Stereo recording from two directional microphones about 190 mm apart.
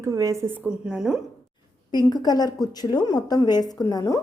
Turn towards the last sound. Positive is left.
turn(degrees=20)  # may be behind; listen again after turning